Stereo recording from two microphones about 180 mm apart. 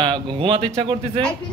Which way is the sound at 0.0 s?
30° right (ahead or behind).